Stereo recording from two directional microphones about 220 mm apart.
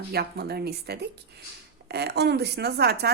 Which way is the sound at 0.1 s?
45° right (ahead or behind).